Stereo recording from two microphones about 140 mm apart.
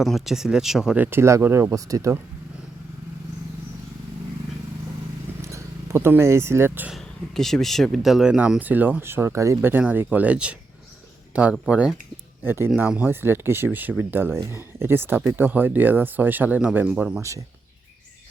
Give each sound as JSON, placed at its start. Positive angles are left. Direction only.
{"t": 0.0, "sound": "speech", "side_deg": 0}
{"t": 5.4, "sound": "speech", "side_deg": -20}
{"t": 6.9, "sound": "speech", "side_deg": 0}
{"t": 11.5, "sound": "speech", "side_deg": -5}
{"t": 12.4, "sound": "speech", "side_deg": -15}
{"t": 17.2, "sound": "speech", "side_deg": -20}